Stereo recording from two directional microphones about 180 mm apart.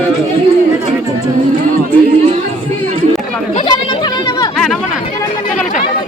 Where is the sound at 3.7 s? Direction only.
20° left (ahead or behind).